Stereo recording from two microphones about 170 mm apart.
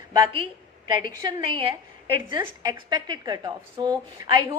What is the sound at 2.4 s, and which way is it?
A woman's voice, 20° right (ahead or behind).